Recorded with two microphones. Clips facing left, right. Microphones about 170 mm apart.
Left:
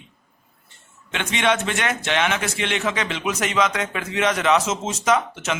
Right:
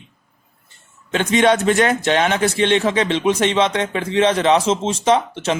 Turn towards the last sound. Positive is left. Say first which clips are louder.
# right 4 dB
turn(degrees=-30)  # may be behind; listen again after turning